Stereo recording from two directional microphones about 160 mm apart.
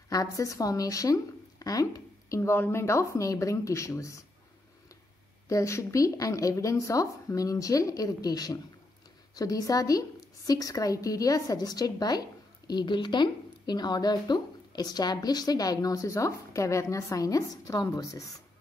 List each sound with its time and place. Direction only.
0.1 s a woman's voice: 20° left (ahead or behind)
5.5 s a woman's voice: 20° left (ahead or behind)